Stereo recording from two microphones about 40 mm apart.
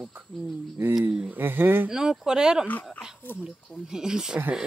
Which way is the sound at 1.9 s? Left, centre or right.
Centre.